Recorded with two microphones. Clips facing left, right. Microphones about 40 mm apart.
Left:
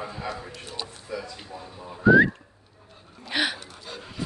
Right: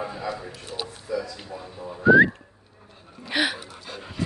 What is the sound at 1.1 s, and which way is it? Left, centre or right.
Speech, left.